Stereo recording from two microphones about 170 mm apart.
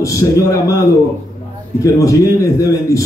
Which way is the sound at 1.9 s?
20° left (ahead or behind).